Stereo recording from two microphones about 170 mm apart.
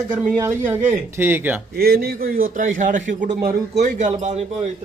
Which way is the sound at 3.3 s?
70° right (ahead or behind).